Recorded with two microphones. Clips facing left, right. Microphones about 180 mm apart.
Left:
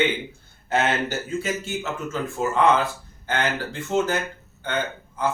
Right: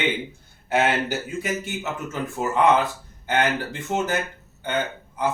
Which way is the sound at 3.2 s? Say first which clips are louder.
Right 3 dB; 15° right (ahead or behind).